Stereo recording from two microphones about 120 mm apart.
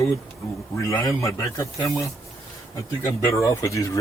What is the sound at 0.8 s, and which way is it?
Speech, 25° left (ahead or behind).